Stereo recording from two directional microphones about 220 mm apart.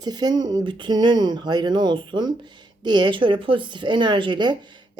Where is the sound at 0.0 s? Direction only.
20° right (ahead or behind).